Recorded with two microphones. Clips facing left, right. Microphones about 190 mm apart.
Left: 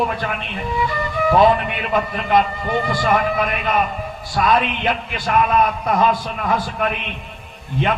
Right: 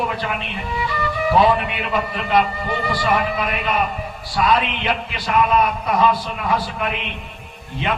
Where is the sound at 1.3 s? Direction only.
50° left (ahead or behind).